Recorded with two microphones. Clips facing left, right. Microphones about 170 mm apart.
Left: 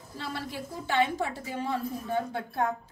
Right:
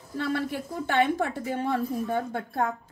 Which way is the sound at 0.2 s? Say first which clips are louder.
Right 8 dB; 55° right (ahead or behind).